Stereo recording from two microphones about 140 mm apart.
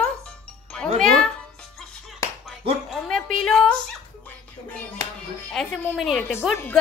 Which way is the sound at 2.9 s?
5° left (ahead or behind).